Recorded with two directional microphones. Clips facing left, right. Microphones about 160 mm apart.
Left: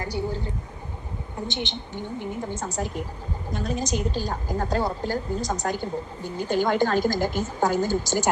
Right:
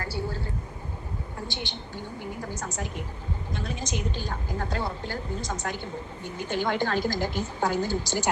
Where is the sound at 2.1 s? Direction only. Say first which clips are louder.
Left 5 dB; 25° left (ahead or behind).